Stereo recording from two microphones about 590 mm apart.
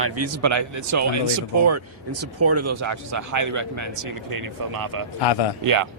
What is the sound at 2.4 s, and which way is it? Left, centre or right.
Speech, right.